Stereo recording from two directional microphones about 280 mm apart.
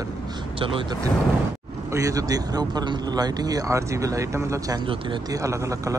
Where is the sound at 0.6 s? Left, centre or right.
Centre.